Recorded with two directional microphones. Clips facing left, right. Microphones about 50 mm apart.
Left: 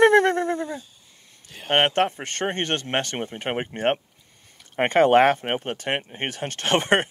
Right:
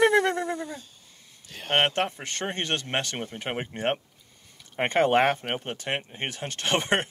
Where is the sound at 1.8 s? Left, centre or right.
Left.